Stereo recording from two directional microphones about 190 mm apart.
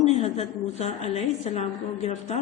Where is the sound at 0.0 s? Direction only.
35° left (ahead or behind).